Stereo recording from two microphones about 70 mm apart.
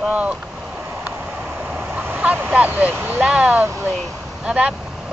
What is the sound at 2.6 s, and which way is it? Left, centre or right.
Speech, right.